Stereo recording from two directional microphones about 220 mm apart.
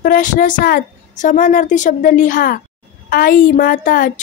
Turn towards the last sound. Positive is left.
turn(degrees=40)  # may be behind; listen again after turning